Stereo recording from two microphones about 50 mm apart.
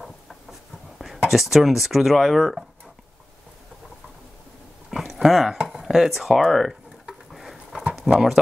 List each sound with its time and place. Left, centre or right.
0.0 s writing: centre
4.9 s dog: centre
5.8 s speech: centre
7.1 s a sound: centre
8.1 s speech: centre